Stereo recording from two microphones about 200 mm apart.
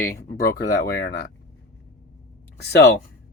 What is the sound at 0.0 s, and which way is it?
Speech, 50° left (ahead or behind).